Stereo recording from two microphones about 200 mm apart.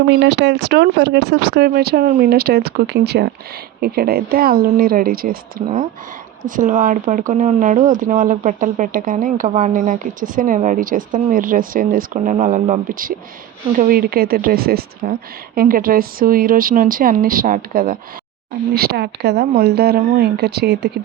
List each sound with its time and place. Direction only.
0.1 s speech: 60° right (ahead or behind)